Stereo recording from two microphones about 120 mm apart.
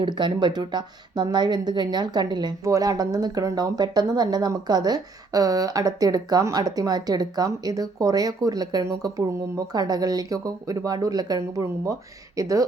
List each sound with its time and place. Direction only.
0.0 s a woman's voice: 40° right (ahead or behind)